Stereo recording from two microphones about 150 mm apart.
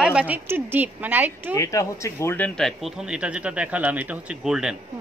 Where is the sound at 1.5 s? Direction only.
20° left (ahead or behind).